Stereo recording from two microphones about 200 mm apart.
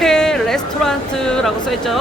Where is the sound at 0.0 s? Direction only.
Centre (ahead or behind).